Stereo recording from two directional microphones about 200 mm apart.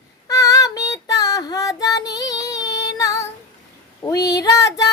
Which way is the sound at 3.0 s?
15° left (ahead or behind).